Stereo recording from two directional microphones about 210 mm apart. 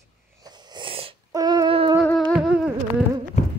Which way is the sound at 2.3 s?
5° right (ahead or behind).